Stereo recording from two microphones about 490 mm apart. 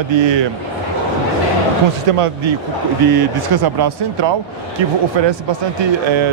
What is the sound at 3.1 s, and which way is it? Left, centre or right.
Speech, right.